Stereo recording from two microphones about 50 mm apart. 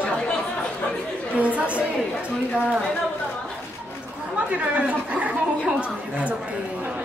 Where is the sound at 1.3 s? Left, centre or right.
Right.